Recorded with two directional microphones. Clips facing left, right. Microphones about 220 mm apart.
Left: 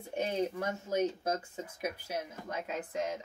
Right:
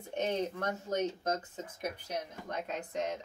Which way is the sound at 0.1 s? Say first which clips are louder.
Left 1 dB; 10° left (ahead or behind).